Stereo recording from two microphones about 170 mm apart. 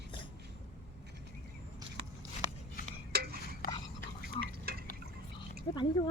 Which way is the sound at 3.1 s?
65° right (ahead or behind).